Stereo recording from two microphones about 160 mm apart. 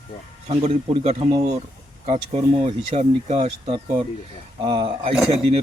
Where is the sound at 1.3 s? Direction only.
25° right (ahead or behind).